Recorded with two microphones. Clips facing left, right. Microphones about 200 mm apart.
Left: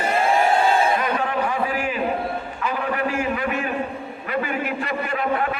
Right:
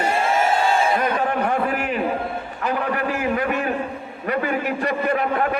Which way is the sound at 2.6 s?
40° right (ahead or behind).